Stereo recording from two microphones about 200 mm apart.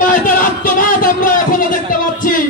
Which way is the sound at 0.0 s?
45° left (ahead or behind).